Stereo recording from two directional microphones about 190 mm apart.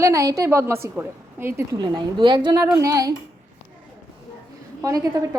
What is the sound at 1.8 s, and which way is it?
A woman's voice, 25° right (ahead or behind).